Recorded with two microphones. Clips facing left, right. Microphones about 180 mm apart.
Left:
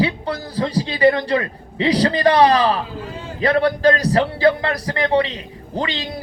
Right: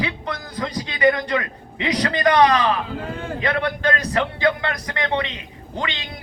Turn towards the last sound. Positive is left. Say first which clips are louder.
# left 5 dB
turn(degrees=35)  # may be behind; listen again after turning